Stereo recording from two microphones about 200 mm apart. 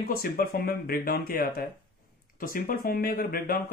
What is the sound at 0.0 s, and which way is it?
Speech, 45° left (ahead or behind).